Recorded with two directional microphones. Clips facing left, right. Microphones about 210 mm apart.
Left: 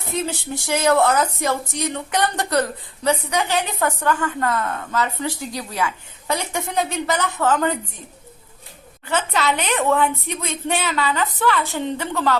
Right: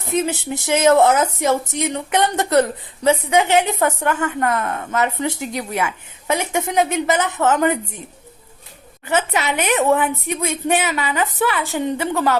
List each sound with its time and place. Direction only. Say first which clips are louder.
0.1 s speech: right 5 dB; 20° right (ahead or behind)
9.0 s speech: right 1 dB; 15° right (ahead or behind)